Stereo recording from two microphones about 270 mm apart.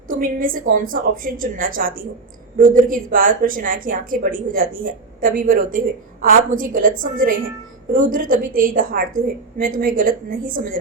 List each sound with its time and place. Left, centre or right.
0.1 s a woman's voice: right